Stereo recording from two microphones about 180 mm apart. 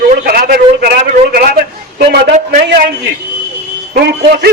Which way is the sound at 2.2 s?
40° right (ahead or behind).